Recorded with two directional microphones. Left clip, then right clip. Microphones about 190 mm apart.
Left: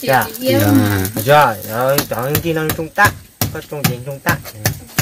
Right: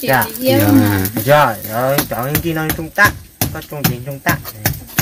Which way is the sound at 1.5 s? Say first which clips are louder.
Left 1 dB; 35° left (ahead or behind).